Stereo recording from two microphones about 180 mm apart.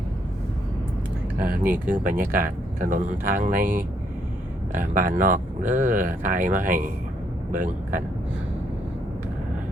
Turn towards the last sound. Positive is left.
turn(degrees=-45)  # may be behind; listen again after turning